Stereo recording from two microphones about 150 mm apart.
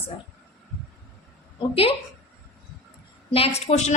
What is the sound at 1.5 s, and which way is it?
Speech, 40° left (ahead or behind).